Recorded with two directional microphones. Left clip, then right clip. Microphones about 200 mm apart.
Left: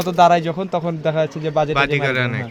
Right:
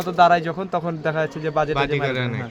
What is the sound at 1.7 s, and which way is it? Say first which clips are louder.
Speech: left 4 dB; centre (ahead or behind).